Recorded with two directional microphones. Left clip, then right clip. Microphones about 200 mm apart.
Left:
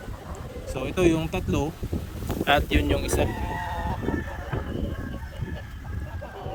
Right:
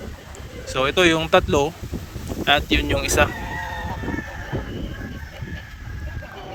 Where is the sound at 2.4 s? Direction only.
15° left (ahead or behind).